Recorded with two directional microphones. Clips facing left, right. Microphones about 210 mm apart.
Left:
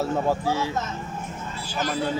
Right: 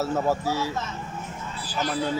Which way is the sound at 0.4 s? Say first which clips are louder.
Left 2 dB; 50° left (ahead or behind).